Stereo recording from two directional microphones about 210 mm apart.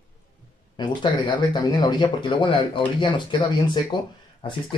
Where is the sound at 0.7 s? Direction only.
20° left (ahead or behind).